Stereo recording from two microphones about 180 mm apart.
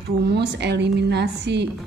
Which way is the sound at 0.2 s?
65° right (ahead or behind).